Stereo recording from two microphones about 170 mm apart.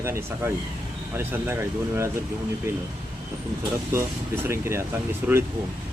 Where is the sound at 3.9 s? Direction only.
15° right (ahead or behind).